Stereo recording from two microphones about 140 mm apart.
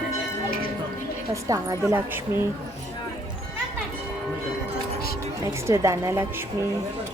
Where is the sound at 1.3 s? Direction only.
25° right (ahead or behind).